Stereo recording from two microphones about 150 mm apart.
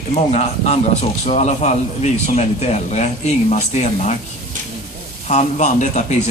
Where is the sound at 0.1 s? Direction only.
50° left (ahead or behind).